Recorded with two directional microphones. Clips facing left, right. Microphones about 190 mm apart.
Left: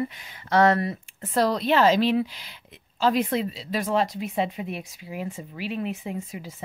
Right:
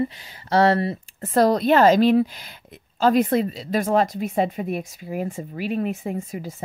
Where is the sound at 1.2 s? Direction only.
45° right (ahead or behind).